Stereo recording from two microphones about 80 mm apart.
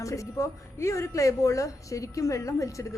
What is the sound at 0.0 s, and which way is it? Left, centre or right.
A woman's voice, left.